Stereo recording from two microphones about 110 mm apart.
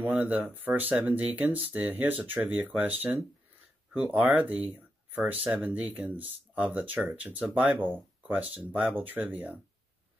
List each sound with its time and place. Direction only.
0.0 s speech: 15° right (ahead or behind)